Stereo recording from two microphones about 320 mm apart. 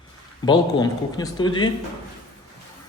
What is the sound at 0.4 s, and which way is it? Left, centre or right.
Speech, centre.